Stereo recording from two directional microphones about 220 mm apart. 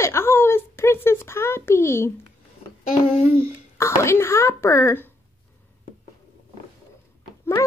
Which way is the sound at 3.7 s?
10° left (ahead or behind).